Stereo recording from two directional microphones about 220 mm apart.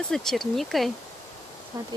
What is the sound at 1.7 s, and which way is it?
Speech, 15° right (ahead or behind).